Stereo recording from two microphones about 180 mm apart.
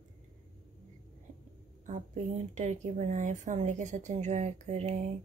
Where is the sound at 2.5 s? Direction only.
40° right (ahead or behind).